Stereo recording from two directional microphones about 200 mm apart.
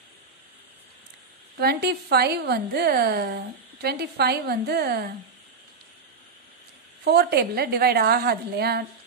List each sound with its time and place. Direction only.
1.6 s a woman's voice: 50° right (ahead or behind)
7.1 s a woman's voice: 55° right (ahead or behind)